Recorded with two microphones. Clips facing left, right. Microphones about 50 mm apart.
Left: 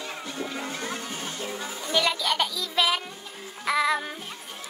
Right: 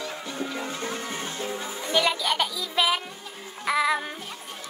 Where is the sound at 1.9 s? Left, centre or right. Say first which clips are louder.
Right 1 dB; centre.